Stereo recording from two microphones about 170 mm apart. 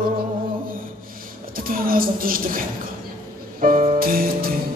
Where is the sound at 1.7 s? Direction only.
55° right (ahead or behind).